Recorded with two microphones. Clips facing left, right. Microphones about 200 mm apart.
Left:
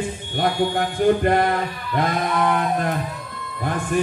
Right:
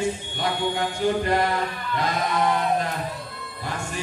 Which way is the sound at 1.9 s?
55° left (ahead or behind).